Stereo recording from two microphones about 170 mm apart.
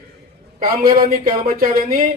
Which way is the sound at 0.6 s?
55° right (ahead or behind).